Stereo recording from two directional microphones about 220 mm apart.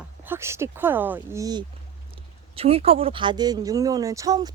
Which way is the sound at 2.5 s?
25° right (ahead or behind).